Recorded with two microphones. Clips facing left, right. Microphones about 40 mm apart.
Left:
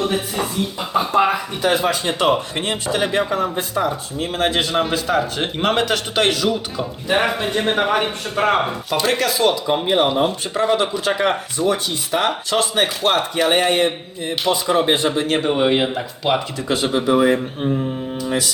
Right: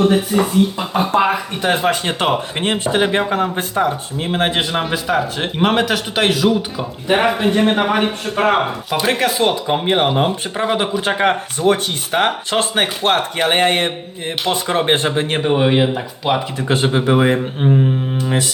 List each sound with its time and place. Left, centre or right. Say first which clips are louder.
0.3 s speech: right 7 dB; right
0.8 s speech: right 1 dB; right
4.7 s a man's voice: even; centre
9.2 s speech: right 1 dB; right
11.0 s speech: right 2 dB; right
15.4 s a man's voice: right 4 dB; centre
16.6 s speech: right 2 dB; right
18.3 s mantra: right 1 dB; right